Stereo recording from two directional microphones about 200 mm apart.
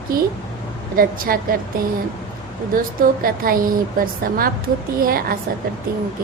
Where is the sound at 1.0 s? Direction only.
45° right (ahead or behind).